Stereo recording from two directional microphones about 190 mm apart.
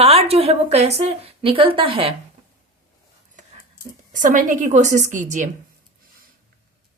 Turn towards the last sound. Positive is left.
turn(degrees=-40)  # may be behind; listen again after turning